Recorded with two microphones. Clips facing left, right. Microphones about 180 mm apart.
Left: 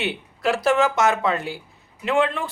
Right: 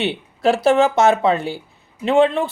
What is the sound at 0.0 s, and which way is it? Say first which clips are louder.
Speech: right 6 dB; 30° right (ahead or behind).